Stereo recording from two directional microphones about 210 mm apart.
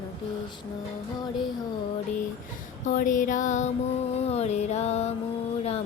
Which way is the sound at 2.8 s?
40° left (ahead or behind).